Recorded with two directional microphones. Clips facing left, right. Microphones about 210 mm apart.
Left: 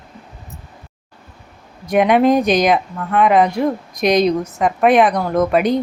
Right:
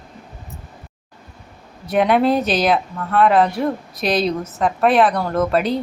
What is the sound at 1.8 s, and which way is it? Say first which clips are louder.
Speech: left 3 dB; 10° left (ahead or behind).